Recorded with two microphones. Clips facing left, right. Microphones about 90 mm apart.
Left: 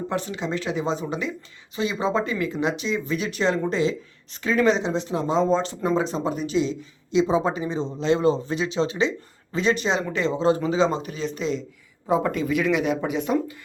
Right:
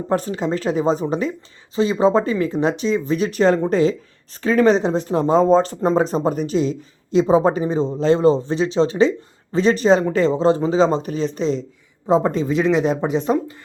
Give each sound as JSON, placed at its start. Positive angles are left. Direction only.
{"t": 0.1, "sound": "speech", "side_deg": -40}